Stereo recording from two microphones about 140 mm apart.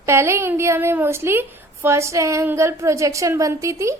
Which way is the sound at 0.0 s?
20° right (ahead or behind).